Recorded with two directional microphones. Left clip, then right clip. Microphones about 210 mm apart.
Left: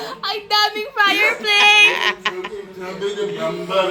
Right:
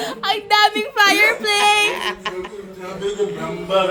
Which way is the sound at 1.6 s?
45° right (ahead or behind).